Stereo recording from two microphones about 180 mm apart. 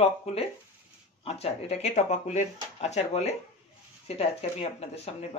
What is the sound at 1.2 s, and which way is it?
Speech, 35° left (ahead or behind).